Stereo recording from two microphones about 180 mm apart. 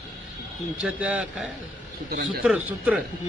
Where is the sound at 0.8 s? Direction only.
5° right (ahead or behind).